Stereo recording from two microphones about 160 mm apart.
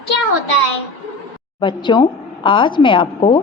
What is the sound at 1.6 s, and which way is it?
A woman's voice, 30° left (ahead or behind).